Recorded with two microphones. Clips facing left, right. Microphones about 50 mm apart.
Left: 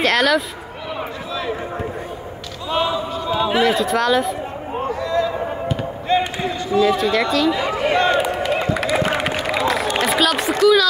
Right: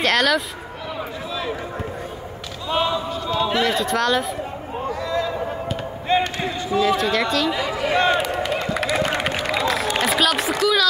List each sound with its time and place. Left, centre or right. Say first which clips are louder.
0.0 s speech: left 2 dB; centre
2.7 s basketball bounce: left 1 dB; centre
3.3 s speech: left 4 dB; centre
5.0 s a sound: left 3 dB; centre
6.1 s speech: left 1 dB; right
6.8 s speech: left 3 dB; centre
7.6 s speech: left 3 dB; left
8.2 s a sound: left 3 dB; centre
8.7 s run: left 2 dB; centre